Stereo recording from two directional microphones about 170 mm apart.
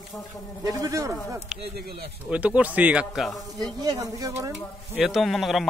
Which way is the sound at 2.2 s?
5° right (ahead or behind).